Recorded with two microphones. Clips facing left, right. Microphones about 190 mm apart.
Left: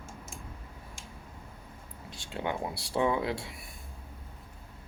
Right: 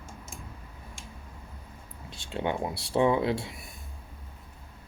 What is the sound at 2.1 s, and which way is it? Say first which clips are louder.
Speech: right 3 dB; 25° right (ahead or behind).